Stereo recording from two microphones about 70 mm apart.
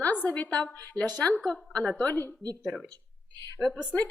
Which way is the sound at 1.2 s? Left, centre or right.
Centre.